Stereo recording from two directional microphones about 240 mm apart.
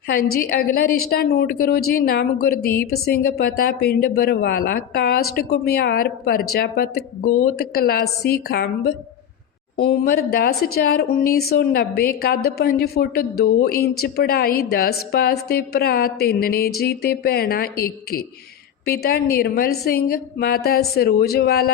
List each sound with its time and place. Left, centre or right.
0.4 s a woman's voice: left